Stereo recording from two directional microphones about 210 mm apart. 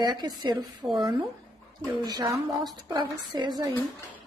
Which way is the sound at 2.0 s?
15° right (ahead or behind).